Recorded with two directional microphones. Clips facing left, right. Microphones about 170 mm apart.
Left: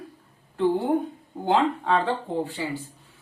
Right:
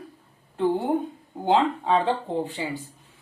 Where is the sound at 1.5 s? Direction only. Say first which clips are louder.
Right 1 dB; 20° right (ahead or behind).